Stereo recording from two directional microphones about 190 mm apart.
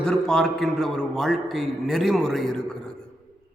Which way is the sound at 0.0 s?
5° left (ahead or behind).